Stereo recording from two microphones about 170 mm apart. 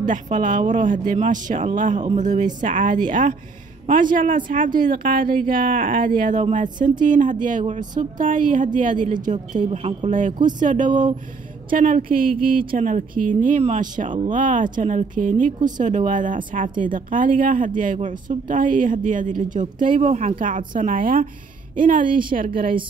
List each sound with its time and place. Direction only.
0.0 s speech: 50° right (ahead or behind)
9.6 s a man's voice: 35° right (ahead or behind); by 22.5 s 55° right (ahead or behind)